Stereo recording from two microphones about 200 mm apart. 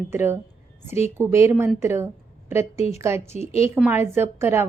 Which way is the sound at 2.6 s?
30° left (ahead or behind).